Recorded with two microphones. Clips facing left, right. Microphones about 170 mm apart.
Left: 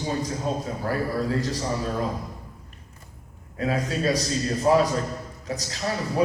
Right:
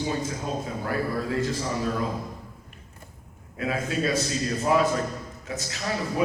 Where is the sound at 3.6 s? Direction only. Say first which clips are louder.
Left 1 dB; 35° left (ahead or behind).